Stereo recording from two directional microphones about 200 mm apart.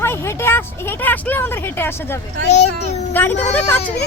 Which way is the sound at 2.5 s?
35° left (ahead or behind).